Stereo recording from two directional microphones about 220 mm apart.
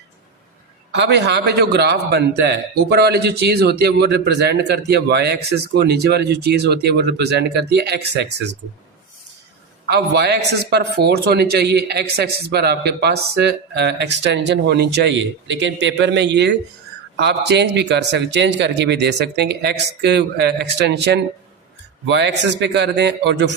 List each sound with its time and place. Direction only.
0.9 s a man's voice: 50° right (ahead or behind)
9.8 s a man's voice: 50° right (ahead or behind)